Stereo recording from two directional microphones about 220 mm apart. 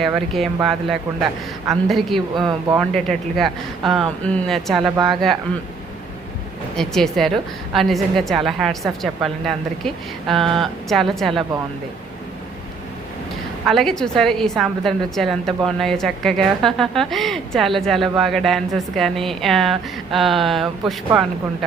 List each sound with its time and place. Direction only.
0.0 s a woman's voice: centre (ahead or behind)
2.3 s speech: 15° right (ahead or behind)
2.9 s a woman's voice: centre (ahead or behind)
6.7 s a woman's voice: centre (ahead or behind)
13.7 s a woman's voice: centre (ahead or behind)